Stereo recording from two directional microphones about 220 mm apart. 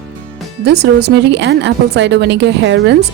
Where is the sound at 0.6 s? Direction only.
50° right (ahead or behind).